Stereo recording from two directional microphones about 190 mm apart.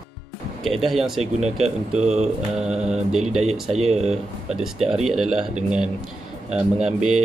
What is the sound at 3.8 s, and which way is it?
Speech, 35° right (ahead or behind).